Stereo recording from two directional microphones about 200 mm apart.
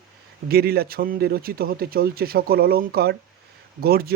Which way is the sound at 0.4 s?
50° right (ahead or behind).